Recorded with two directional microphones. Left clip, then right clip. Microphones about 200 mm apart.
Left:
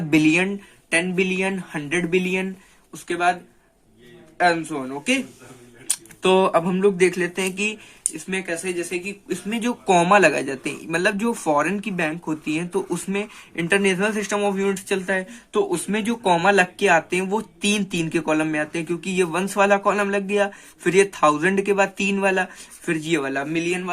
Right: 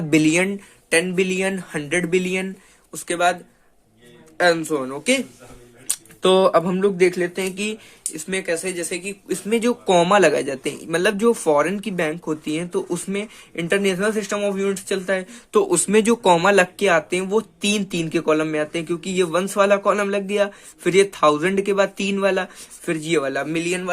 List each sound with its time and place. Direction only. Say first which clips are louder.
0.1 s speech: right 1 dB; 15° right (ahead or behind)
0.9 s speech: right 2 dB; 30° right (ahead or behind)
2.9 s speech: right 1 dB; 40° right (ahead or behind)
4.4 s speech: right 2 dB; 40° right (ahead or behind)
5.9 s speech: right 2 dB; 15° right (ahead or behind)
8.1 s speech: right 4 dB; 30° right (ahead or behind)
9.8 s speech: left 1 dB; 10° right (ahead or behind)
15.5 s speech: right 6 dB; 30° right (ahead or behind); by 23.3 s 15° right (ahead or behind)
23.3 s speech: right 1 dB; 30° right (ahead or behind)